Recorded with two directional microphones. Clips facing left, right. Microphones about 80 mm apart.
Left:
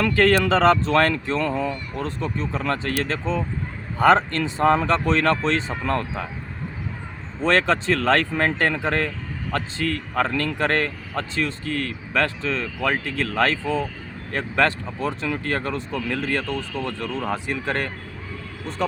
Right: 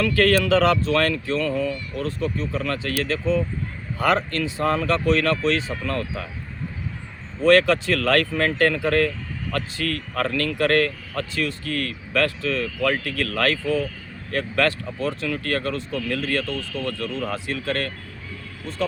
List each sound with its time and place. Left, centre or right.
0.0 s speech: left
7.4 s speech: left